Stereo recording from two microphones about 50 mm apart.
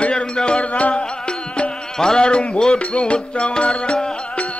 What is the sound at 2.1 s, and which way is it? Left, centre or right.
Music, centre.